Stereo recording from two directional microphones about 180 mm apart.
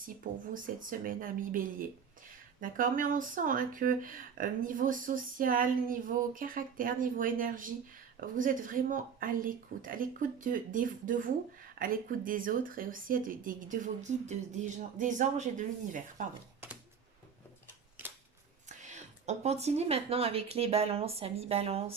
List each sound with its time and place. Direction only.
0.5 s speech: 50° right (ahead or behind)
18.8 s speech: 40° right (ahead or behind)